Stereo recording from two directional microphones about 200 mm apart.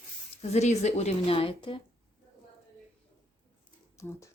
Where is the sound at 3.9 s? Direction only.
15° left (ahead or behind).